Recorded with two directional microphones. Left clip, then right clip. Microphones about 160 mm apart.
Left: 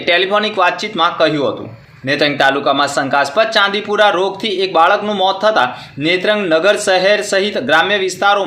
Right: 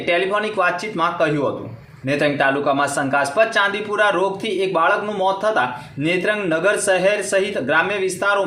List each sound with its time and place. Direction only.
0.0 s a man's voice: 20° left (ahead or behind)